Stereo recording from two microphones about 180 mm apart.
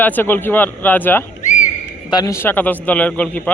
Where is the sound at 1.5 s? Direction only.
45° left (ahead or behind).